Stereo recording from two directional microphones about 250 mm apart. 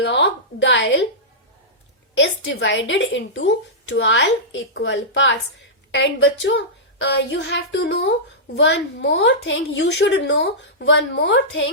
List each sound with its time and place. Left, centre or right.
0.0 s a woman's voice: left
2.1 s a woman's voice: left